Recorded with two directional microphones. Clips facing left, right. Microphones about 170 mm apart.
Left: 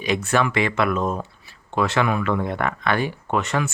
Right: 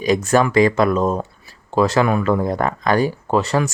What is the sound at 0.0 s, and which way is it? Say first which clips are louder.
Speech: right 5 dB; 40° right (ahead or behind).